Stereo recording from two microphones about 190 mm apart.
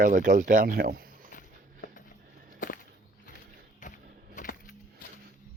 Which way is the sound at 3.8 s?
40° left (ahead or behind).